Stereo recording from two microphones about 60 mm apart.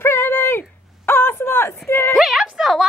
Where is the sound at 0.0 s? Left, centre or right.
Left.